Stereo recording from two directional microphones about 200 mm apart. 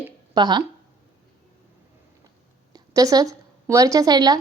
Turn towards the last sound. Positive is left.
turn(degrees=-20)  # may be behind; listen again after turning